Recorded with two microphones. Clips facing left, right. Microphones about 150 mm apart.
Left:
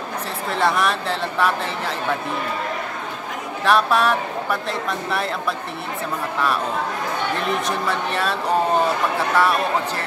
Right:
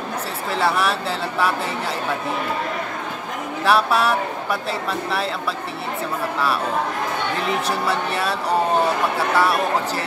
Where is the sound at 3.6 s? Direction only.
10° right (ahead or behind).